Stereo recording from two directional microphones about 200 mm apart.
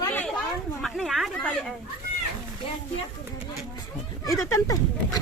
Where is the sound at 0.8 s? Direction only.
Centre (ahead or behind).